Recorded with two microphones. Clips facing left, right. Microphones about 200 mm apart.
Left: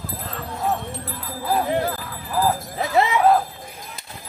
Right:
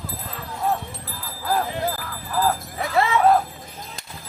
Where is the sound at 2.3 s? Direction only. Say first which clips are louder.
Left 1 dB; 15° left (ahead or behind).